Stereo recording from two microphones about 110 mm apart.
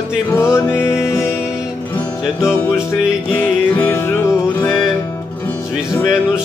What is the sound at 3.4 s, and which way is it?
Music, 15° left (ahead or behind).